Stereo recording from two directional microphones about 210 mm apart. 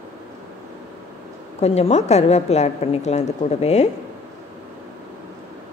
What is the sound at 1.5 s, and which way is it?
A woman's voice, 30° left (ahead or behind).